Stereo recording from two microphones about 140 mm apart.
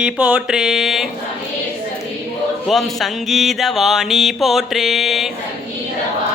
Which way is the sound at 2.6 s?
Centre (ahead or behind).